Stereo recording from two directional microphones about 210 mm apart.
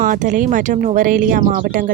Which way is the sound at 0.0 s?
40° right (ahead or behind).